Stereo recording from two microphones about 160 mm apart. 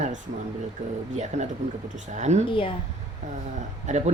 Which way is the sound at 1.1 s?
45° right (ahead or behind).